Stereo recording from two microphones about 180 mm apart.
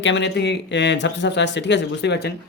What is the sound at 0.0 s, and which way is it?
Speech, 80° left.